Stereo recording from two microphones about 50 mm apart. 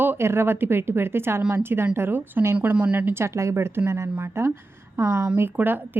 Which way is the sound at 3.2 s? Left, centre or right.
Right.